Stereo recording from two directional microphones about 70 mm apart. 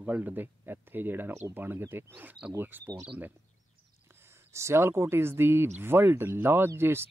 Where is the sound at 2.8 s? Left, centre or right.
Right.